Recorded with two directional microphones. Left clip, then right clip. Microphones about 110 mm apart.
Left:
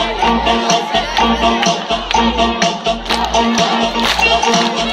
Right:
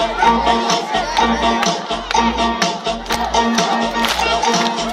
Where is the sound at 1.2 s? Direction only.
20° left (ahead or behind).